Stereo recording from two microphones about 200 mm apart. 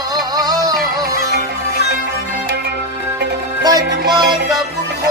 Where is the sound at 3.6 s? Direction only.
20° right (ahead or behind).